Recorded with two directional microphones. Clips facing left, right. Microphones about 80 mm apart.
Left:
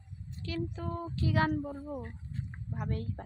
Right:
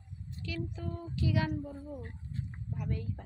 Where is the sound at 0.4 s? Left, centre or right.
Left.